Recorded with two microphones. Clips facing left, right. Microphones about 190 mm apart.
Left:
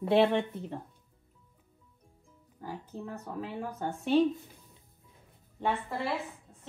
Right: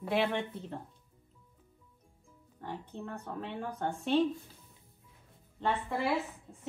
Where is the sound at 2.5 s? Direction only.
5° left (ahead or behind).